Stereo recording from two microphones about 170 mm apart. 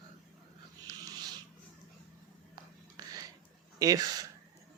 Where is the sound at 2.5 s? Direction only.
20° right (ahead or behind).